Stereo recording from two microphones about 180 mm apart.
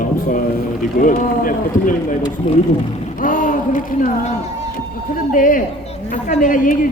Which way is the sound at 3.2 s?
50° left (ahead or behind).